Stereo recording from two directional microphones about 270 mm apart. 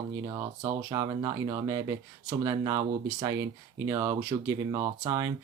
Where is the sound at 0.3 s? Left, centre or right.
Centre.